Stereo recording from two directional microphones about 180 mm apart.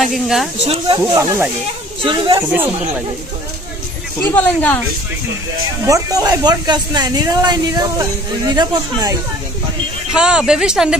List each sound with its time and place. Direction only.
0.0 s a woman's voice: centre (ahead or behind)
0.7 s speech: 30° right (ahead or behind)
1.1 s speech: 15° right (ahead or behind)
2.0 s speech: 25° right (ahead or behind)
4.2 s speech: 10° left (ahead or behind)
5.9 s speech: 20° right (ahead or behind)
10.1 s a woman's voice: 5° right (ahead or behind)